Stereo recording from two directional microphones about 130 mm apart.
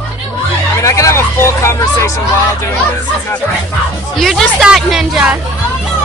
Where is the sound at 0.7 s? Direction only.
25° left (ahead or behind).